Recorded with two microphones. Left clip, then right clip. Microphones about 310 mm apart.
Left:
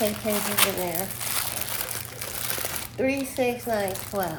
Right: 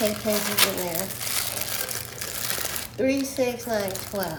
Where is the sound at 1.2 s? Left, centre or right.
Centre.